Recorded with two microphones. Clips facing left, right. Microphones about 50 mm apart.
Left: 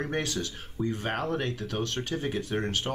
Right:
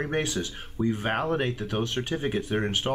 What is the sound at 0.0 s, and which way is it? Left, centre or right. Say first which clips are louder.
Speech: right 3 dB; centre.